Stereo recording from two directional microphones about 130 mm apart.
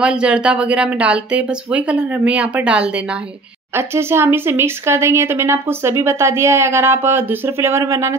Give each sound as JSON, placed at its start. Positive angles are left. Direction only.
{"t": 0.0, "sound": "speech", "side_deg": -5}
{"t": 3.7, "sound": "speech", "side_deg": -20}